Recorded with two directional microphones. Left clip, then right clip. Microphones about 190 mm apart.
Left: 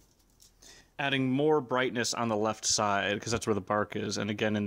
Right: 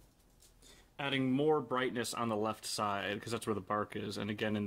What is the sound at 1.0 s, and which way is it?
Speech, 40° left (ahead or behind).